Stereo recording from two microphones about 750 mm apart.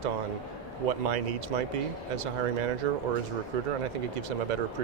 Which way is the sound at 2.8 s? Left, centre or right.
Right.